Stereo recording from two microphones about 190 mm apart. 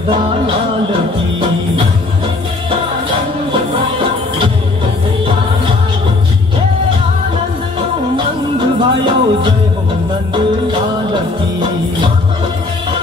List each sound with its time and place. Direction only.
8.5 s music: 25° right (ahead or behind)